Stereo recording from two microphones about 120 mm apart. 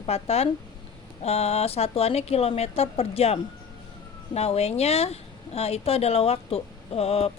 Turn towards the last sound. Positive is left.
turn(degrees=60)  # may be behind; listen again after turning